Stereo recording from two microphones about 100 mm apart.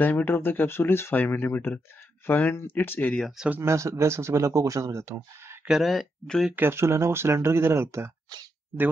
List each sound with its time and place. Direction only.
0.0 s speech: 20° left (ahead or behind)
3.6 s speech: 30° right (ahead or behind)
5.7 s speech: centre (ahead or behind)
6.5 s speech: 25° right (ahead or behind)